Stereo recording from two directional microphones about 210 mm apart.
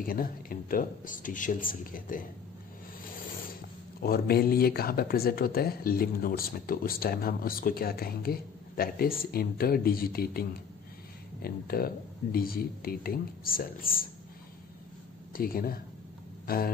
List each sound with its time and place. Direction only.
0.0 s speech: 45° left (ahead or behind)
4.0 s speech: 45° left (ahead or behind)
11.4 s speech: 45° left (ahead or behind)
15.3 s speech: 45° left (ahead or behind)
16.4 s a sound: 45° left (ahead or behind)